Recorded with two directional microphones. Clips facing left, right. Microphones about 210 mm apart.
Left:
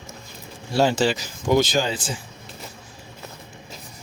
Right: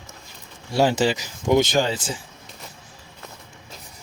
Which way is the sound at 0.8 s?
10° right (ahead or behind).